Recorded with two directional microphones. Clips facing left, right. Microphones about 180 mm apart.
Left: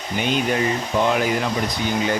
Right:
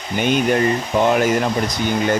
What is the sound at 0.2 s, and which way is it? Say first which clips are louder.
Speech: right 4 dB; 50° right (ahead or behind).